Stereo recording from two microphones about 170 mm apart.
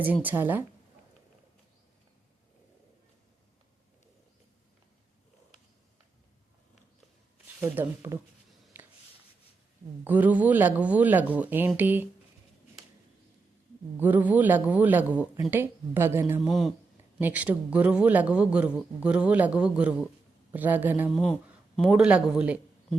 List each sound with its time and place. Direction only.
0.0 s speech: 10° right (ahead or behind)
7.6 s speech: 15° right (ahead or behind)
8.7 s a sound: 10° right (ahead or behind)
10.0 s speech: 10° right (ahead or behind)
14.0 s speech: 10° right (ahead or behind)
16.5 s speech: centre (ahead or behind)